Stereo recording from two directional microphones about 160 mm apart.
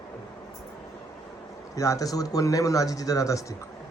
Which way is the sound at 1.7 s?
20° left (ahead or behind).